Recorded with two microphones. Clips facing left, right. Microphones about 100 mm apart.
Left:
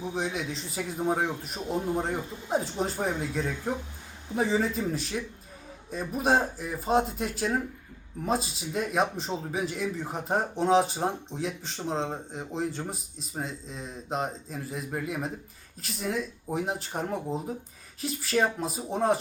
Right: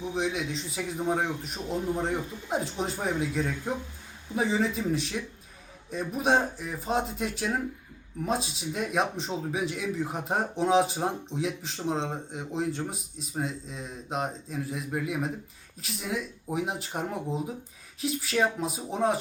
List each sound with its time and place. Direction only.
0.1 s speech: centre (ahead or behind)